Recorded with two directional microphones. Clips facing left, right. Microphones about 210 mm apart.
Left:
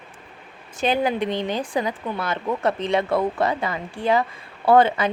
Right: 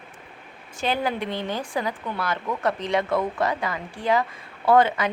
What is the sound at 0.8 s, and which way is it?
Speech, 15° left (ahead or behind).